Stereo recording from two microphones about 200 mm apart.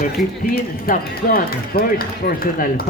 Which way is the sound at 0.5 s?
50° left (ahead or behind).